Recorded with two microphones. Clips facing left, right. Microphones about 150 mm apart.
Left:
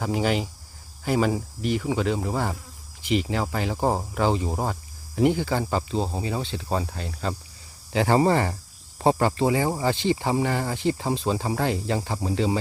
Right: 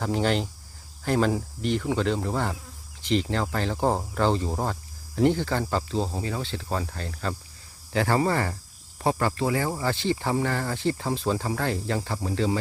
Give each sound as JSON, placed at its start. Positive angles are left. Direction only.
{"t": 0.0, "sound": "speech", "side_deg": 5}